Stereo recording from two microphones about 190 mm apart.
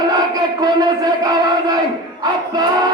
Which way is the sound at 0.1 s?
20° right (ahead or behind).